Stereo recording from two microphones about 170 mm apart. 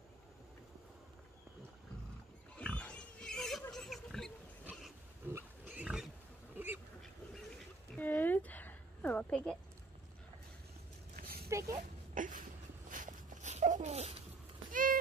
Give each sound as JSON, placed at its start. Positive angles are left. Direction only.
{"t": 2.5, "sound": "pig", "side_deg": 10}
{"t": 3.7, "sound": "oink", "side_deg": 0}
{"t": 4.6, "sound": "pig", "side_deg": -10}
{"t": 6.5, "sound": "duck", "side_deg": -10}
{"t": 7.0, "sound": "duck", "side_deg": 0}
{"t": 11.1, "sound": "a sound", "side_deg": -65}
{"t": 11.4, "sound": "a sound", "side_deg": -15}
{"t": 12.1, "sound": "a sound", "side_deg": -50}
{"t": 12.9, "sound": "dog", "side_deg": -50}
{"t": 14.7, "sound": "run", "side_deg": -55}